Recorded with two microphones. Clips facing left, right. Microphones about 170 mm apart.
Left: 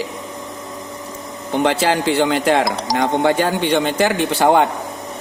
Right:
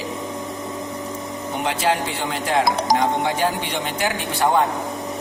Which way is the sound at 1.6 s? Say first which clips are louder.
Left 5 dB; 80° left.